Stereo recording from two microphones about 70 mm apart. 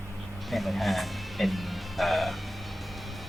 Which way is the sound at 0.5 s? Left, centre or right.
Centre.